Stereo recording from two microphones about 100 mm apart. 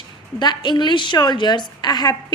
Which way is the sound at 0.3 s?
45° left (ahead or behind).